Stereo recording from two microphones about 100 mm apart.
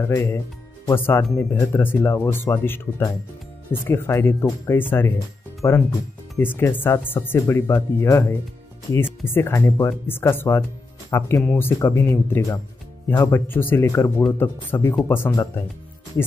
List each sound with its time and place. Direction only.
0.0 s speech: 30° left (ahead or behind)